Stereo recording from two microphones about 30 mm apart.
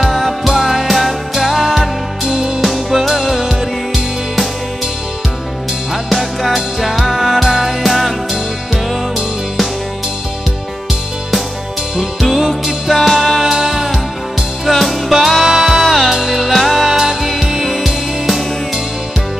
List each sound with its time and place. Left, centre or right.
0.0 s music: centre
1.8 s music: centre
2.6 s music: centre
6.0 s music: centre
12.2 s music: centre
13.5 s music: centre
14.7 s music: centre
15.4 s music: centre